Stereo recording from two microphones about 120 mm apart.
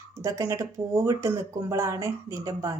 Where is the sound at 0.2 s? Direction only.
25° right (ahead or behind).